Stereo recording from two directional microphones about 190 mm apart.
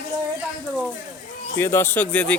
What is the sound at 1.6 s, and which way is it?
Speech, 15° left (ahead or behind).